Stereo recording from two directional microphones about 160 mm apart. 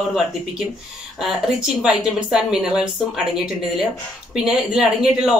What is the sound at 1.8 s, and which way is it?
Speech, 5° right (ahead or behind).